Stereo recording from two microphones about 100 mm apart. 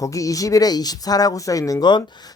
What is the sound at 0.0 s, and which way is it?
Speech, 35° left (ahead or behind).